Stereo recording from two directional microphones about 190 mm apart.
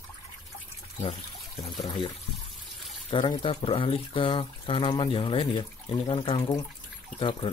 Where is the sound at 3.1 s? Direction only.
25° left (ahead or behind).